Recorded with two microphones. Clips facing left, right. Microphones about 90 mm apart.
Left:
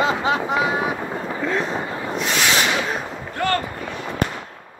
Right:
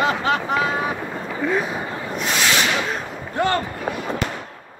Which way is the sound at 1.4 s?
10° right (ahead or behind).